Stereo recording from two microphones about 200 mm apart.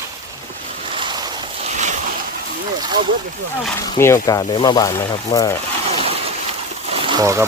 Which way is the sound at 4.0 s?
15° left (ahead or behind).